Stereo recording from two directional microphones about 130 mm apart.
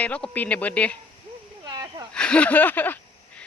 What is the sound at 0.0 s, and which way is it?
Speech, 10° left (ahead or behind).